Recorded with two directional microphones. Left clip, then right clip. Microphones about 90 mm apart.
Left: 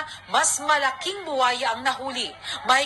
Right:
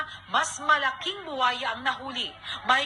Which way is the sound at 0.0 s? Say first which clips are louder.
Left 4 dB; 35° left (ahead or behind).